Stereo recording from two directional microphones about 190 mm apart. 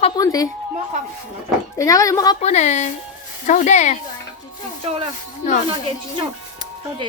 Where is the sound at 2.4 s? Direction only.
35° left (ahead or behind).